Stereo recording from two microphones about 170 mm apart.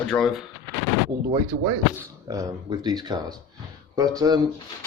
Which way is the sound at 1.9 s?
20° right (ahead or behind).